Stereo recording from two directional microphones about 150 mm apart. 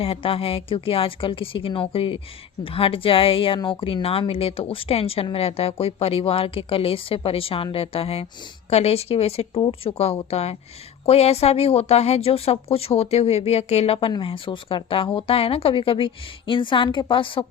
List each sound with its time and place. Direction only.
0.0 s a woman's voice: 40° left (ahead or behind)